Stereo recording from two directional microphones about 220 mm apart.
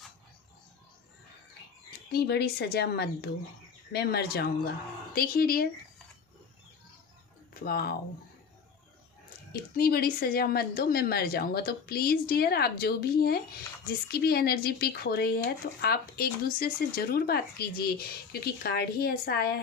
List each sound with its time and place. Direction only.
1.9 s speech: 45° left (ahead or behind)
7.6 s speech: 45° left (ahead or behind)
9.5 s speech: 45° left (ahead or behind)